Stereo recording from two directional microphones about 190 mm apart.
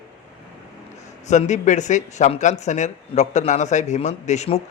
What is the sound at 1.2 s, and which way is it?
A man's voice, 40° left (ahead or behind).